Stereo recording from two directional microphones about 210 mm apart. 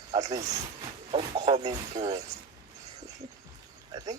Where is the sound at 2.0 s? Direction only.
20° right (ahead or behind).